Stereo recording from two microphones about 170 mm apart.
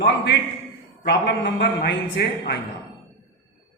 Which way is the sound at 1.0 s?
85° left.